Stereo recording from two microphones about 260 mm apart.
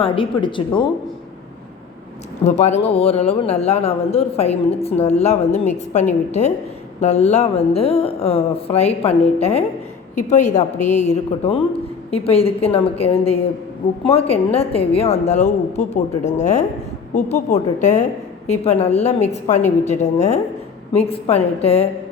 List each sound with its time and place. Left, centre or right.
0.0 s a woman's voice: centre
2.4 s a woman's voice: left